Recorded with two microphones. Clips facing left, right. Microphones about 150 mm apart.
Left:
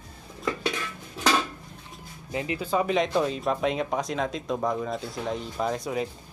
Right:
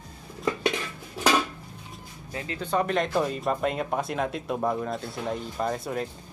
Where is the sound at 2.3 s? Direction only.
15° left (ahead or behind).